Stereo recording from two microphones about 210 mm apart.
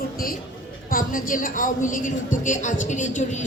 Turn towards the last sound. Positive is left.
turn(degrees=35)  # may be behind; listen again after turning